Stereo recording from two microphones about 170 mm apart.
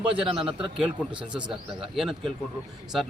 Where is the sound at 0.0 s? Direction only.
30° right (ahead or behind).